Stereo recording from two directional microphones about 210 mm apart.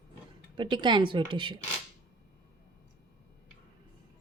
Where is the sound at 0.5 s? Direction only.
20° right (ahead or behind).